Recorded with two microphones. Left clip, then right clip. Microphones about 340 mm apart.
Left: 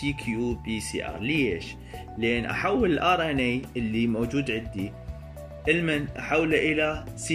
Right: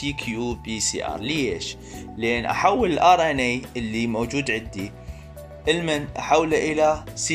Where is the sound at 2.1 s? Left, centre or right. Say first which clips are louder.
Right 4 dB; centre.